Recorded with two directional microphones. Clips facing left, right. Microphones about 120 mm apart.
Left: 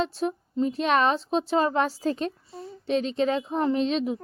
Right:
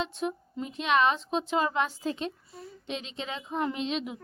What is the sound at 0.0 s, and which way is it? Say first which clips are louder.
A woman's voice: left 5 dB; 35° left (ahead or behind).